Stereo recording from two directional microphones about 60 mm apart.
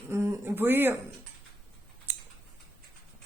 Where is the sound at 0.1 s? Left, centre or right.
Right.